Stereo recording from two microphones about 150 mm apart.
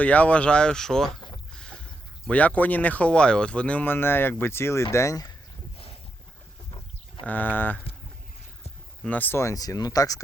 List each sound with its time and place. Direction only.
0.0 s speech: 10° left (ahead or behind)
7.3 s speech: 10° left (ahead or behind)
9.0 s speech: 10° left (ahead or behind)